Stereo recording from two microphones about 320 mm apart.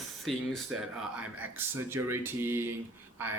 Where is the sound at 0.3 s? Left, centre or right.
Centre.